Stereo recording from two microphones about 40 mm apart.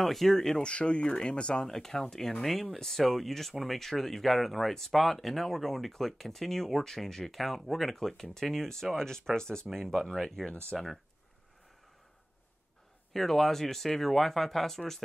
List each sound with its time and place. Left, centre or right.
0.0 s speech: centre
0.5 s speech: left
1.7 s speech: centre
10.7 s speech: centre
13.1 s speech: centre